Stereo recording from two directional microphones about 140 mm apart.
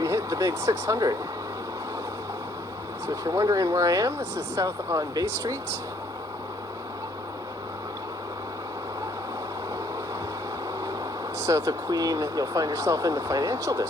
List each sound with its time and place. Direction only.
0.0 s speech: 20° right (ahead or behind)
3.1 s speech: 25° right (ahead or behind)
11.3 s speech: 25° right (ahead or behind)